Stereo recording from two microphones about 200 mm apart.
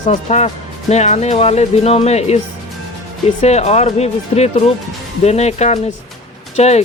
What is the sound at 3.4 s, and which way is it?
Speech, 35° left (ahead or behind).